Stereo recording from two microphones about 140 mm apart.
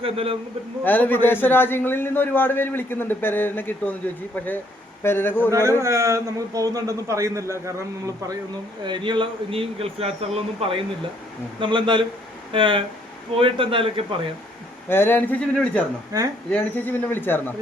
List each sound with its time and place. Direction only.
0.0 s speech: 45° right (ahead or behind)
0.9 s a man's voice: 10° left (ahead or behind)
5.5 s a man's voice: 20° right (ahead or behind)
8.8 s speech: 35° right (ahead or behind)
11.6 s a man's voice: 35° right (ahead or behind)
14.8 s a man's voice: 15° left (ahead or behind)